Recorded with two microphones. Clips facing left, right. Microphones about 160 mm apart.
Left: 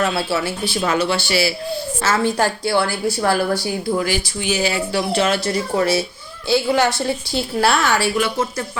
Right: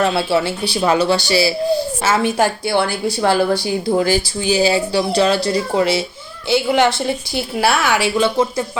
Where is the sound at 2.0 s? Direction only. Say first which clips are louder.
Left 2 dB; 15° right (ahead or behind).